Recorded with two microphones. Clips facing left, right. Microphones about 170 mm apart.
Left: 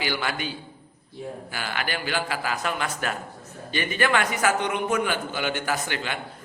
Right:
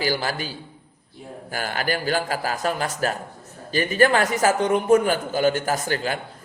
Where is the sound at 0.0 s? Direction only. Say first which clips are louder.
Right 3 dB; 40° right (ahead or behind).